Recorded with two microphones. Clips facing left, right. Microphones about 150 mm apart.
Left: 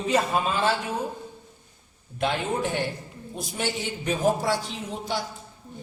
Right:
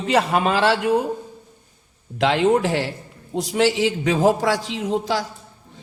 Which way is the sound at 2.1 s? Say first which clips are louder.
Right 9 dB; 90° right.